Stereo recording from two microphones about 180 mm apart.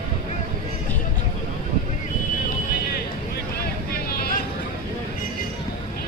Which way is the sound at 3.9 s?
55° left (ahead or behind).